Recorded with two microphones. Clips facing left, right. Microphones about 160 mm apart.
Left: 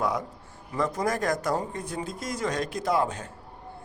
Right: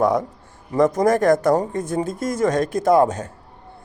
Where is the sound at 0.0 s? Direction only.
45° right (ahead or behind).